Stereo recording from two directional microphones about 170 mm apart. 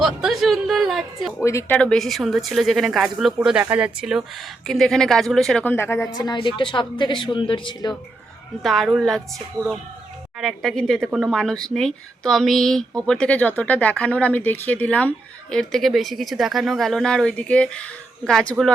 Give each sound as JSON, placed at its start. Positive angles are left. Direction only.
{"t": 0.0, "sound": "speech", "side_deg": 0}
{"t": 1.5, "sound": "speech", "side_deg": 15}
{"t": 6.1, "sound": "speech", "side_deg": 25}
{"t": 8.6, "sound": "speech", "side_deg": 0}
{"t": 9.6, "sound": "speech", "side_deg": -25}
{"t": 10.4, "sound": "speech", "side_deg": 5}